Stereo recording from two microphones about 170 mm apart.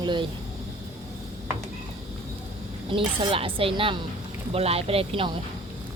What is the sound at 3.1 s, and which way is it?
A woman's voice, 30° right (ahead or behind).